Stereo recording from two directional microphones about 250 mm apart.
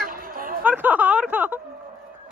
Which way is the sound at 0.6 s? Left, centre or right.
Centre.